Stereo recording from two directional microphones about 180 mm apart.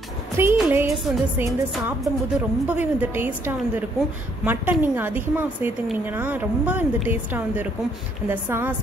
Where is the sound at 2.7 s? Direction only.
10° right (ahead or behind).